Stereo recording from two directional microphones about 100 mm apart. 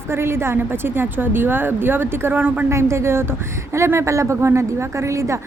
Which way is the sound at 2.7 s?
30° right (ahead or behind).